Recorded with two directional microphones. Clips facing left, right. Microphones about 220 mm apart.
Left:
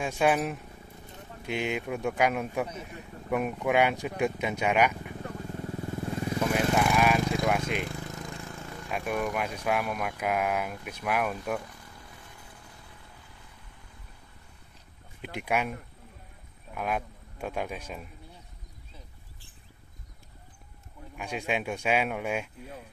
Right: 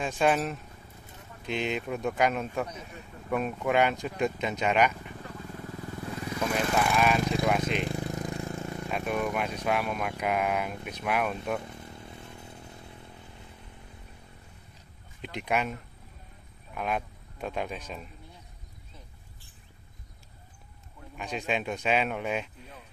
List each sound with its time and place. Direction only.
0.0 s speech: 10° left (ahead or behind)
5.5 s motorcycle: 25° left (ahead or behind)
6.4 s lawn mower: 5° left (ahead or behind)
7.4 s a sound: 10° left (ahead or behind)
7.9 s a sound: 20° right (ahead or behind)
8.9 s speech: 5° left (ahead or behind)
11.6 s motorcycle: 25° right (ahead or behind)
15.3 s speech: 10° left (ahead or behind)
16.7 s speech: 5° left (ahead or behind)
21.2 s speech: 10° left (ahead or behind)